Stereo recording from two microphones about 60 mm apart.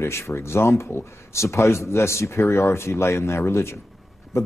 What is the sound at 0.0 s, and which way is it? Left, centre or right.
Speech, left.